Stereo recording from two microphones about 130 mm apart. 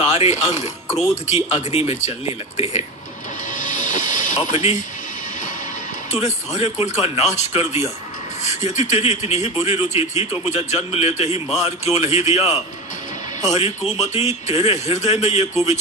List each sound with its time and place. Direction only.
0.0 s a man's voice: 55° left (ahead or behind)
3.6 s music: 80° left
4.4 s speech: 55° left (ahead or behind)
6.1 s a man's voice: 60° left (ahead or behind)